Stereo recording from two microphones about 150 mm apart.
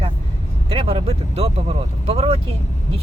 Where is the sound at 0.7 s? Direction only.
35° right (ahead or behind).